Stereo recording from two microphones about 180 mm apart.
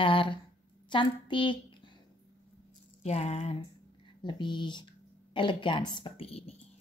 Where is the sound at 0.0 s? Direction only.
30° left (ahead or behind).